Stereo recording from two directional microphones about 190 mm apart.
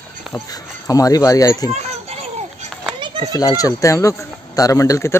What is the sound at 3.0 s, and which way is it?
Children playing, 25° right (ahead or behind).